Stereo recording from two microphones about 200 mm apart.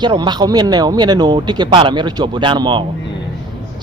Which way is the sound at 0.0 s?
20° right (ahead or behind).